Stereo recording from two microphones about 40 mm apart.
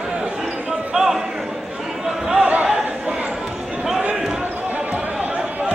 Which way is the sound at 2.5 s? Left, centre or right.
Right.